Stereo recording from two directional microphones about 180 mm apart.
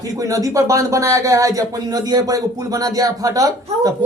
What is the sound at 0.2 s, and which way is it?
Speech, 20° right (ahead or behind).